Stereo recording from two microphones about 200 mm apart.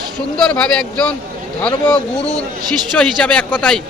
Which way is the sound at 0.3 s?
5° left (ahead or behind).